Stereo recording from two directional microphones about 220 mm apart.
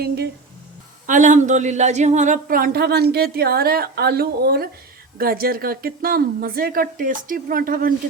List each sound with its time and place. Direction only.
1.0 s a woman's voice: 35° right (ahead or behind)